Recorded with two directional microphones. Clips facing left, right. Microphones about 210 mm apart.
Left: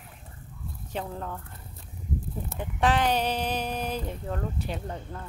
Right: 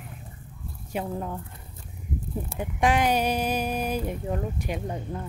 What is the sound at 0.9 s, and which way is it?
Speech, 10° right (ahead or behind).